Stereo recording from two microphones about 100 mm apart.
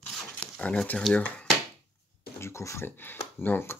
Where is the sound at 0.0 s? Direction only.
10° left (ahead or behind).